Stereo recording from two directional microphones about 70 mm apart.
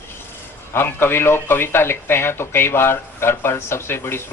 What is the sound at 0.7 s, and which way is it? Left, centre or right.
Speech, left.